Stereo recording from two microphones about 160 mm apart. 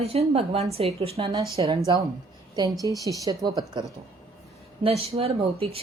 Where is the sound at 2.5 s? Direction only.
20° right (ahead or behind).